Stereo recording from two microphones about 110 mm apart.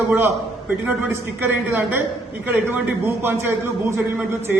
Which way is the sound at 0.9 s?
15° right (ahead or behind).